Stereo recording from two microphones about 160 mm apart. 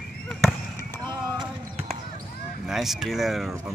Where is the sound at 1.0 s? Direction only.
25° right (ahead or behind).